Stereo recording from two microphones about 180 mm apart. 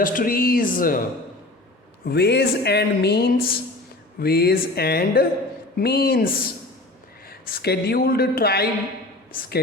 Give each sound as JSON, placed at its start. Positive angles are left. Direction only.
{"t": 0.0, "sound": "speech", "side_deg": 50}
{"t": 2.0, "sound": "speech", "side_deg": 65}